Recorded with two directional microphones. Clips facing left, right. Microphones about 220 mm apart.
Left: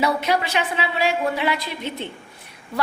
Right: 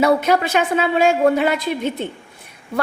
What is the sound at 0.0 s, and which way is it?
A woman's voice, 50° right (ahead or behind).